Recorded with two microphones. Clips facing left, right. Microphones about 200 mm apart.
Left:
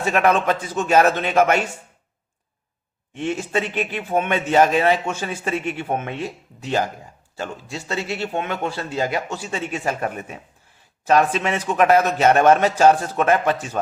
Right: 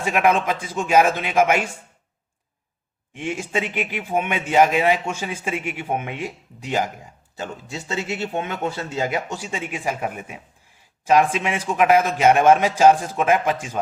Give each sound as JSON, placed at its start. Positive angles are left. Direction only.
{"t": 0.0, "sound": "speech", "side_deg": -10}
{"t": 3.2, "sound": "speech", "side_deg": -10}